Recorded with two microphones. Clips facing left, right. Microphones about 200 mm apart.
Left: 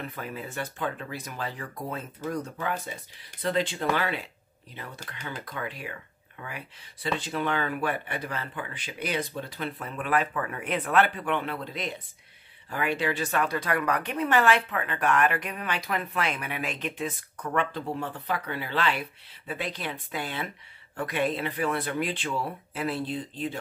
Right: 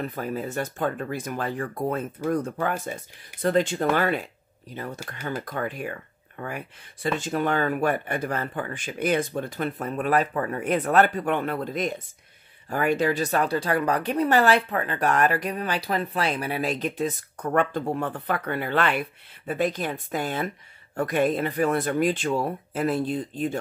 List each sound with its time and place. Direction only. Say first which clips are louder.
0.0 s speech: right 7 dB; 40° right (ahead or behind)